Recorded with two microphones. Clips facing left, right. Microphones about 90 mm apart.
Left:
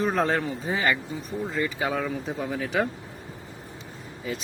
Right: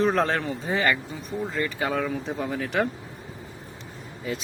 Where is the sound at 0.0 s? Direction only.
5° left (ahead or behind).